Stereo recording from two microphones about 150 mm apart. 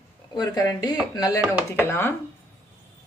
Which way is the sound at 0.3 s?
25° left (ahead or behind).